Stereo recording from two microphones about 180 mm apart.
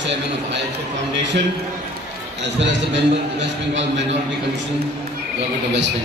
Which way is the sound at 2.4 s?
80° right.